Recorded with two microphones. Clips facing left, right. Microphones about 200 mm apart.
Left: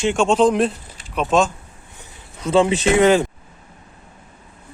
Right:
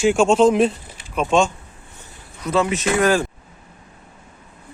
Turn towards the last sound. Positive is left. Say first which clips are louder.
# left 4 dB
turn(degrees=20)  # may be behind; listen again after turning